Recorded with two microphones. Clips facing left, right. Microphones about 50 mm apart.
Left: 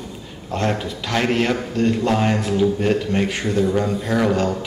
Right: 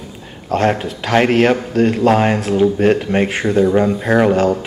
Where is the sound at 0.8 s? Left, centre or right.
Right.